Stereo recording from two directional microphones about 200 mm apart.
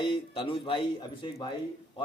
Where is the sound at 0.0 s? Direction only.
25° left (ahead or behind).